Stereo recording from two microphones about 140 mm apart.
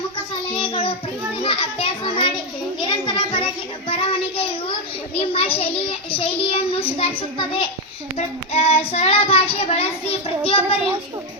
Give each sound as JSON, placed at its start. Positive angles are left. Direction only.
{"t": 0.5, "sound": "child singing", "side_deg": 40}
{"t": 1.4, "sound": "children playing", "side_deg": 40}
{"t": 2.8, "sound": "child singing", "side_deg": 35}
{"t": 5.2, "sound": "a child's voice", "side_deg": 40}
{"t": 8.5, "sound": "child singing", "side_deg": 45}